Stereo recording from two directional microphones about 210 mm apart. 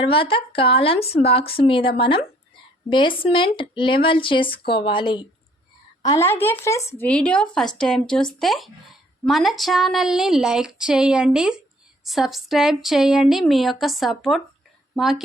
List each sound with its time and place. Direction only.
0.0 s speech: 25° left (ahead or behind); by 7.4 s 5° left (ahead or behind)
7.5 s a sound: centre (ahead or behind)
14.9 s a woman's voice: centre (ahead or behind)